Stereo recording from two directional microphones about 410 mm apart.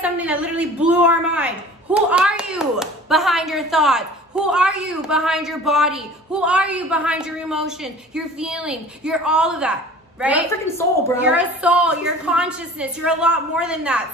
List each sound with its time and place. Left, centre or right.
0.0 s speech: centre